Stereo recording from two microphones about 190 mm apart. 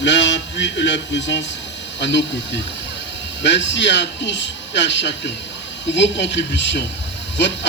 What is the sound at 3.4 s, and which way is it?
Speech, 70° left (ahead or behind).